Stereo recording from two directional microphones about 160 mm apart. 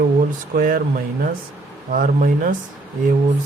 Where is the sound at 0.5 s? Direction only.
60° right (ahead or behind).